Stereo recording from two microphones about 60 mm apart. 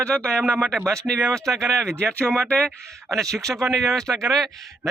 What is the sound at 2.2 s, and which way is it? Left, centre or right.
Speech, right.